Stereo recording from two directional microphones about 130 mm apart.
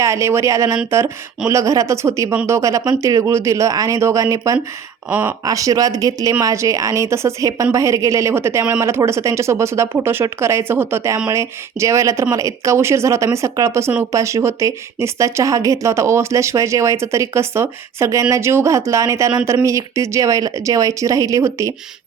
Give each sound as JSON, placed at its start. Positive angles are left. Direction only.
{"t": 0.0, "sound": "a woman's voice", "side_deg": -20}
{"t": 5.0, "sound": "speech", "side_deg": -15}
{"t": 5.5, "sound": "a woman's voice", "side_deg": -25}